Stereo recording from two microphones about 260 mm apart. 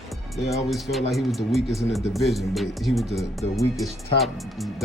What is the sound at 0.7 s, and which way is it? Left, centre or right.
Speech, centre.